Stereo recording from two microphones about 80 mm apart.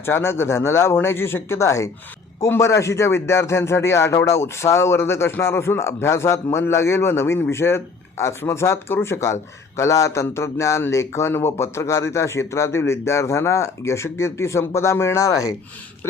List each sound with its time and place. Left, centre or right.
0.0 s speech: left